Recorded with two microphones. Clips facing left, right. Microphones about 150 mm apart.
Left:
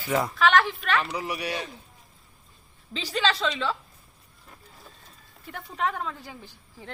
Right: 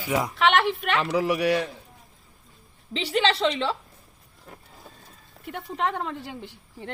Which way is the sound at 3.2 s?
25° right (ahead or behind).